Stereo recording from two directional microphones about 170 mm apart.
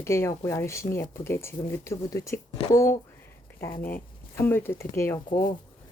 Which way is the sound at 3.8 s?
10° left (ahead or behind).